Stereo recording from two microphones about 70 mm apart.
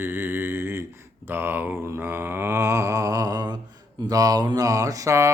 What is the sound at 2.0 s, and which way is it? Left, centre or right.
Mantra, right.